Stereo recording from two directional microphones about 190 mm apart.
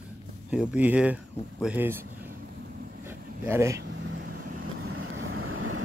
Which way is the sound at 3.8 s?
70° right (ahead or behind).